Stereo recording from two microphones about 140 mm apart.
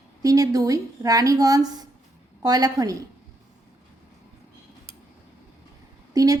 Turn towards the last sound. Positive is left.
turn(degrees=-25)  # may be behind; listen again after turning